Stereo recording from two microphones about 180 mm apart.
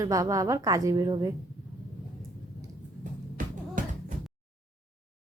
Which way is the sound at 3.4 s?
50° right (ahead or behind).